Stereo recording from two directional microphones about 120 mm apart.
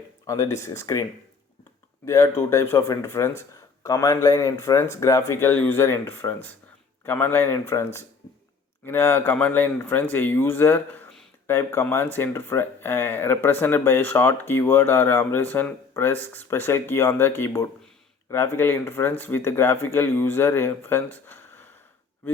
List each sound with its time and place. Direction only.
0.3 s speech: 25° left (ahead or behind)
2.0 s speech: 25° left (ahead or behind)
8.9 s speech: 15° left (ahead or behind)